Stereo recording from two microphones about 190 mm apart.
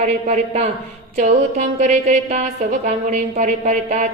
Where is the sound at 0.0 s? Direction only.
35° right (ahead or behind).